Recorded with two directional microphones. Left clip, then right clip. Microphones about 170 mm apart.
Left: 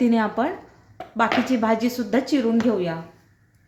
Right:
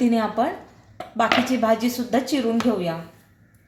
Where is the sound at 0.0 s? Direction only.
10° left (ahead or behind).